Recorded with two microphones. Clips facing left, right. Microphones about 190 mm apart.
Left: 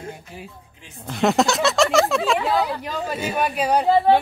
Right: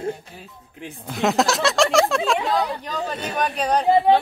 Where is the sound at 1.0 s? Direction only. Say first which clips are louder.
Left 1 dB; centre (ahead or behind).